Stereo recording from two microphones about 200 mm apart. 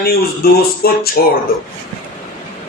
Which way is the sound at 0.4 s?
50° left (ahead or behind).